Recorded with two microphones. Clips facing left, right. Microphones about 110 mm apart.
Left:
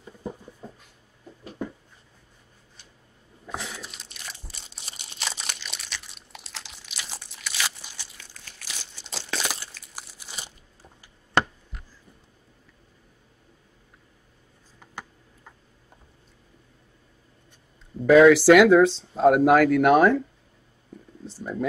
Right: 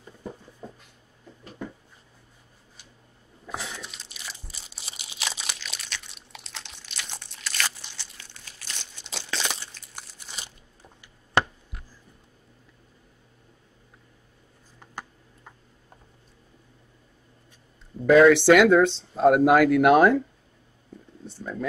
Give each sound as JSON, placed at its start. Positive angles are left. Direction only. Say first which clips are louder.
{"t": 3.4, "sound": "crunch", "louder": "even", "side_deg": 0}
{"t": 18.0, "sound": "speech", "louder": "left 1 dB", "side_deg": 0}
{"t": 21.4, "sound": "a sound", "louder": "left 3 dB", "side_deg": 10}